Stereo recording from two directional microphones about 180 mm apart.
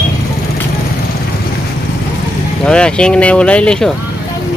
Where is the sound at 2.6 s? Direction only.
5° left (ahead or behind).